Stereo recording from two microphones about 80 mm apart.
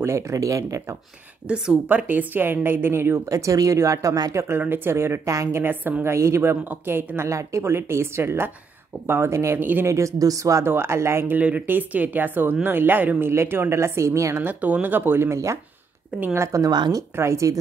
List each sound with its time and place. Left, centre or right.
0.0 s speech: right
1.5 s speech: centre
3.3 s speech: right
4.6 s speech: right
5.6 s speech: right
9.6 s speech: right
9.8 s speech: right
10.6 s speech: right
14.4 s speech: right
16.7 s speech: right
17.1 s speech: right